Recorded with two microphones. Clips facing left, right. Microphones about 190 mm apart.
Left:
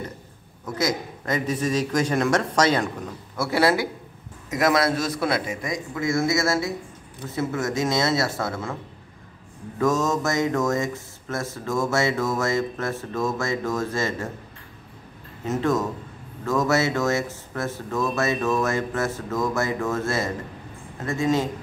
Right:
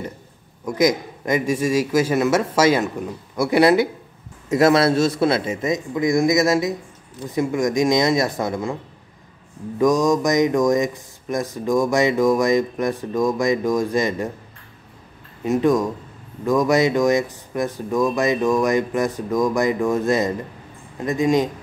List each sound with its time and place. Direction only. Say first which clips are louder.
0.7 s a man's voice: right 7 dB; 15° right (ahead or behind)
9.8 s speech: right 5 dB; 15° right (ahead or behind)
15.4 s speech: right 5 dB; 15° right (ahead or behind)